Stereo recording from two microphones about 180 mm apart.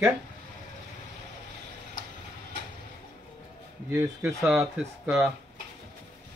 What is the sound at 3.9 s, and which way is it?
Speech, 15° right (ahead or behind).